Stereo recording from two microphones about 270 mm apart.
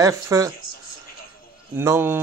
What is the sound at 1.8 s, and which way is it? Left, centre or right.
Speech, centre.